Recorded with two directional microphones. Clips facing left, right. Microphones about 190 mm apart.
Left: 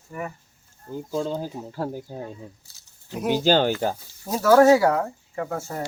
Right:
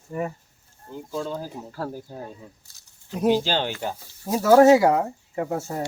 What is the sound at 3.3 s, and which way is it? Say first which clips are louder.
Speech: left 7 dB; 45° left (ahead or behind).